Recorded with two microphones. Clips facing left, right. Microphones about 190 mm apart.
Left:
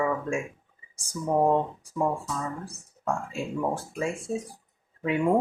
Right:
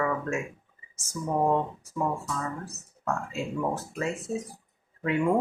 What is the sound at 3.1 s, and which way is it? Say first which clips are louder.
Speech: left 1 dB; 10° left (ahead or behind).